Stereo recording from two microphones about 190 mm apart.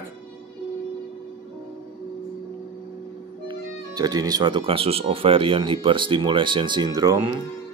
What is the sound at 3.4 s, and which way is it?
Speech, 25° right (ahead or behind).